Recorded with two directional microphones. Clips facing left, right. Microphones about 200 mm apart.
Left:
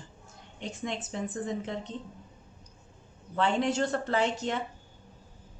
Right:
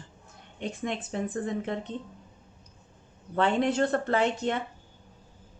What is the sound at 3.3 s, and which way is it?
A woman's voice, 55° right (ahead or behind).